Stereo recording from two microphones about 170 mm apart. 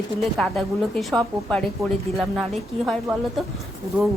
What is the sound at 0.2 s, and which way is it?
A woman's voice, centre (ahead or behind).